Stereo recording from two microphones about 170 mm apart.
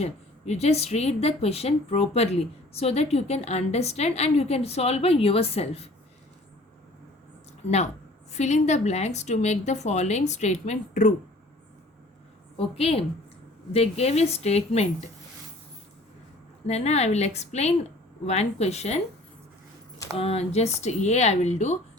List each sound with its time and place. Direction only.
0.0 s a woman's voice: 40° left (ahead or behind)
8.3 s speech: 40° left (ahead or behind)
12.5 s a woman's voice: 35° left (ahead or behind)
16.6 s a woman's voice: 40° left (ahead or behind)
20.1 s a woman's voice: 35° left (ahead or behind)